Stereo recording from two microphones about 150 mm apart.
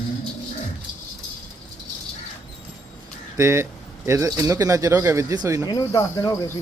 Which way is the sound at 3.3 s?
20° right (ahead or behind).